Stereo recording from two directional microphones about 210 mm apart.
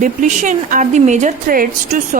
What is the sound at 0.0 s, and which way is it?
A woman's voice, 35° right (ahead or behind).